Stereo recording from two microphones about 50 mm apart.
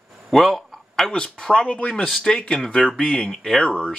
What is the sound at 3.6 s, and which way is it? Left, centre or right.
Speech, left.